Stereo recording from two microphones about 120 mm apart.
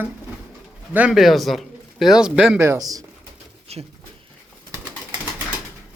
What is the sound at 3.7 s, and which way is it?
Speech, 60° right (ahead or behind).